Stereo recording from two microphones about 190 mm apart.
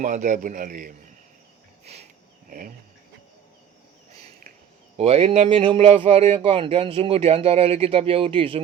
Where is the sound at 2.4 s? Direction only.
45° right (ahead or behind).